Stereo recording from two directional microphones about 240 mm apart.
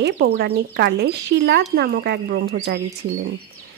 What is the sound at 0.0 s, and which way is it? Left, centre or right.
Speech, right.